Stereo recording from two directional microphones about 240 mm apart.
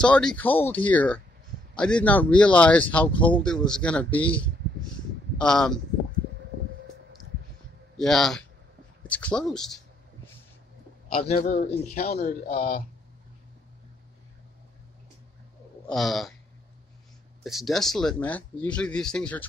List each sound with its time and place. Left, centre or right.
0.0 s speech: centre
8.0 s speech: centre
11.1 s a man's voice: left
15.9 s speech: centre
17.4 s speech: centre